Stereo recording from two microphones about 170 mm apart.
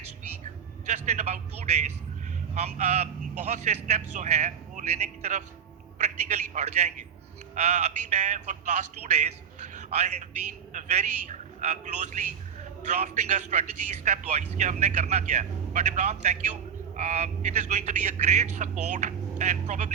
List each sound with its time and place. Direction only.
0.9 s a man's voice: 45° right (ahead or behind)
9.7 s a sound: 45° right (ahead or behind)
10.7 s a man's voice: 45° right (ahead or behind)